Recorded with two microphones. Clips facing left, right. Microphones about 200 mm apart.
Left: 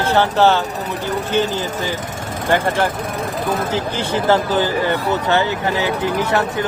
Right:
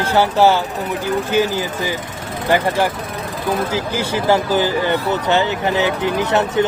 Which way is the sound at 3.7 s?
10° right (ahead or behind).